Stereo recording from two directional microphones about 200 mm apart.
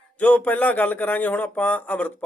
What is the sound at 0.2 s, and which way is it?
A man's voice, 10° left (ahead or behind).